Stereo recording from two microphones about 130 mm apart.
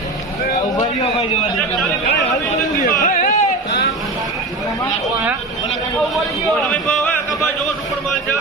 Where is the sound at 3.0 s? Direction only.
85° left.